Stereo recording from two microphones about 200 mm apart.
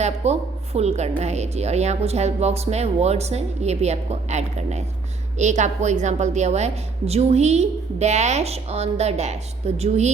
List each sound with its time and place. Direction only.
0.0 s speech: 30° right (ahead or behind)